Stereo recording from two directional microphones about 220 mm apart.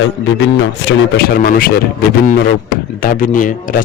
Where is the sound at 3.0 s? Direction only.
40° left (ahead or behind).